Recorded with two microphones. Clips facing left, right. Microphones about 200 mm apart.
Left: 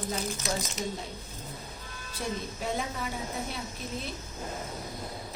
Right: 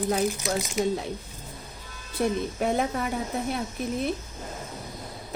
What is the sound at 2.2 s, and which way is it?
Speech, 65° right (ahead or behind).